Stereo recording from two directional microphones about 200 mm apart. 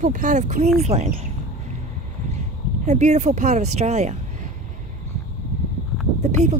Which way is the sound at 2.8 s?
35° right (ahead or behind).